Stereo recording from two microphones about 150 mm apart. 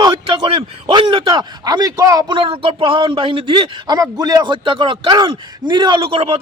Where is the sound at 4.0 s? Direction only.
25° right (ahead or behind).